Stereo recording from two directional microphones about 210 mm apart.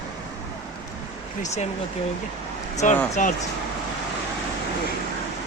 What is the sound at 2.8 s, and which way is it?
Speech, 35° left (ahead or behind).